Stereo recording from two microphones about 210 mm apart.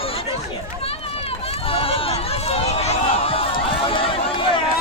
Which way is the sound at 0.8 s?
30° left (ahead or behind).